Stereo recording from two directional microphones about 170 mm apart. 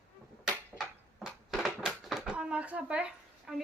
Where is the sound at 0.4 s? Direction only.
5° right (ahead or behind).